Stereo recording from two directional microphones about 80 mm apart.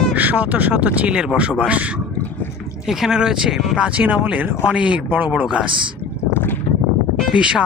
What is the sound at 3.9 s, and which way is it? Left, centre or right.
Speech, centre.